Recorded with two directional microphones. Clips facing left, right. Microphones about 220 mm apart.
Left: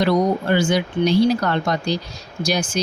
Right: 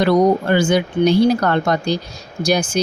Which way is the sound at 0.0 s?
50° right (ahead or behind).